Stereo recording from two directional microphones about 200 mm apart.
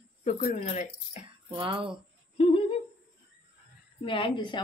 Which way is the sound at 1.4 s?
25° right (ahead or behind).